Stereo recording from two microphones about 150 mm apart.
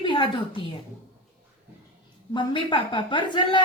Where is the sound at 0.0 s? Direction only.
30° left (ahead or behind).